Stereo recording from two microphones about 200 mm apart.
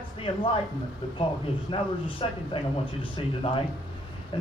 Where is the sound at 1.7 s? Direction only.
25° left (ahead or behind).